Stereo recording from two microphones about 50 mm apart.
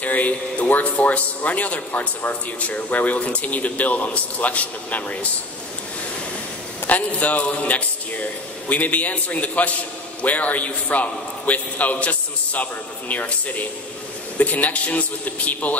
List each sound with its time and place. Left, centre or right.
0.0 s speech: left
6.9 s speech: left